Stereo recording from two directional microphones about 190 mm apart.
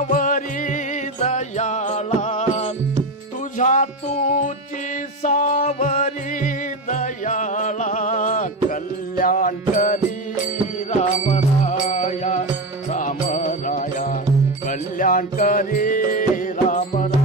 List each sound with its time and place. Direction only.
0.0 s music: 45° left (ahead or behind)